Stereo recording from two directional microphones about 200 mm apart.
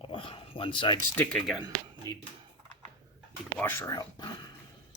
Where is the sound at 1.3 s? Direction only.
Centre (ahead or behind).